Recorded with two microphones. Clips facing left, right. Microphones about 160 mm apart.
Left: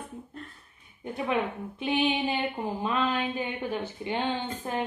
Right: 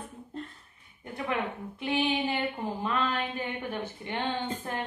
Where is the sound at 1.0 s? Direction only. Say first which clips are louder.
Left 3 dB; 20° left (ahead or behind).